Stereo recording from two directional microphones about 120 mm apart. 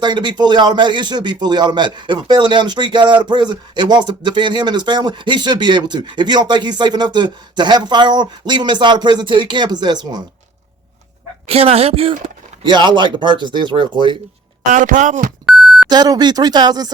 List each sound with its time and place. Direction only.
0.0 s a man's voice: 40° right (ahead or behind)
11.4 s speech: 55° right (ahead or behind)
12.6 s a man's voice: 40° right (ahead or behind)
14.7 s speech: 90° right
15.9 s a man's voice: 35° right (ahead or behind)